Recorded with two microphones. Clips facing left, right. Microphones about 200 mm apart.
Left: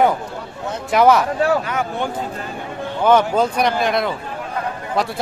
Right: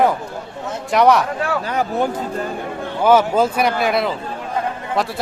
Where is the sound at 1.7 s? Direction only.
35° right (ahead or behind).